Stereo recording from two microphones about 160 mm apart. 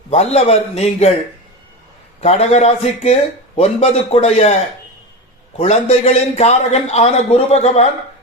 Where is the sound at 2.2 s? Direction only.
40° left (ahead or behind).